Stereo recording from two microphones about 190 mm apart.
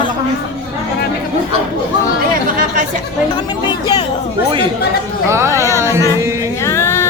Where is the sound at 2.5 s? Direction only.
45° right (ahead or behind).